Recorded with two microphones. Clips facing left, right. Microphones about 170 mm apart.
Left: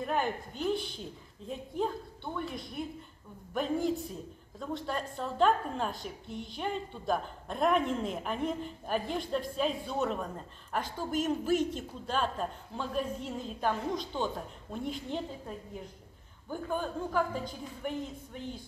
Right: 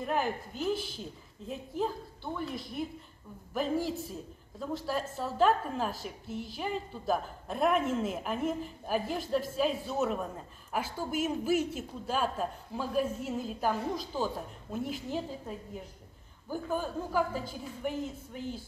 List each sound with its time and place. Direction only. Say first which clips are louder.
0.0 s a woman's voice: even; 5° right (ahead or behind)